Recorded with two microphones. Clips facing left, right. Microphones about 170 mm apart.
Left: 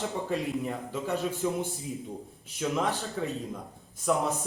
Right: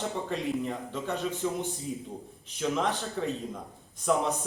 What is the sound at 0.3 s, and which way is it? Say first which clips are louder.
Speech: even; 5° left (ahead or behind).